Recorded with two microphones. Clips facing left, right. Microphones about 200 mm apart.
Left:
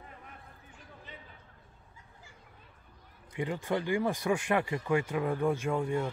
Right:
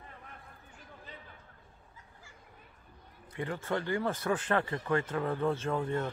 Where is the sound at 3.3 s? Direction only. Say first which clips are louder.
Left 2 dB; 15° left (ahead or behind).